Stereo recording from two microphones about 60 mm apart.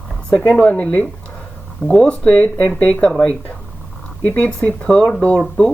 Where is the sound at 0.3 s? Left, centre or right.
Centre.